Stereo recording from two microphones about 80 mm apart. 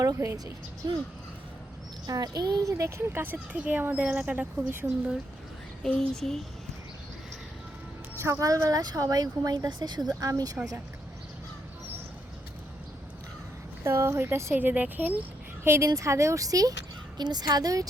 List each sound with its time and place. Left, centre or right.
0.2 s speech: right
2.0 s speech: right
3.1 s speech: right
5.8 s speech: centre
8.2 s speech: right
9.6 s speech: right
10.2 s speech: right
13.8 s speech: right
14.5 s speech: right
17.2 s speech: right